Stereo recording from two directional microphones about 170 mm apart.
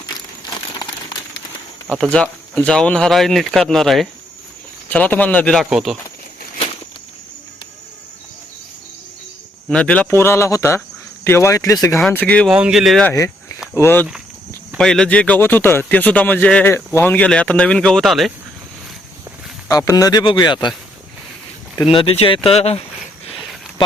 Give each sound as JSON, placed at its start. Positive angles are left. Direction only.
{"t": 1.9, "sound": "a man's voice", "side_deg": 5}
{"t": 9.6, "sound": "a man's voice", "side_deg": 5}
{"t": 12.0, "sound": "a man's voice", "side_deg": 5}
{"t": 12.5, "sound": "speech", "side_deg": -5}
{"t": 13.1, "sound": "a man's voice", "side_deg": 20}
{"t": 19.6, "sound": "speech", "side_deg": 20}
{"t": 21.9, "sound": "speech", "side_deg": 35}